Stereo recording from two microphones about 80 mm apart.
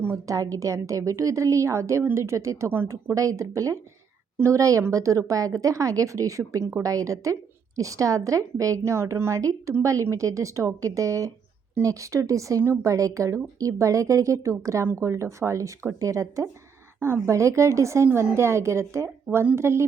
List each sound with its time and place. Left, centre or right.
0.3 s a woman's voice: right
3.2 s a woman's voice: right